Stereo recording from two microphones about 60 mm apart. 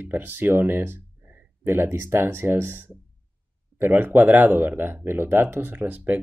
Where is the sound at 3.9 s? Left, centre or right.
Right.